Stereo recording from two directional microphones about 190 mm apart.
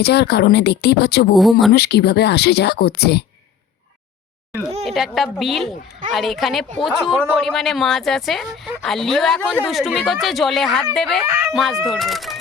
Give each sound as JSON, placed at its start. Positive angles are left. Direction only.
{"t": 0.0, "sound": "speech", "side_deg": 60}
{"t": 1.4, "sound": "speech", "side_deg": 0}
{"t": 1.7, "sound": "speech", "side_deg": 60}
{"t": 4.9, "sound": "speech", "side_deg": 0}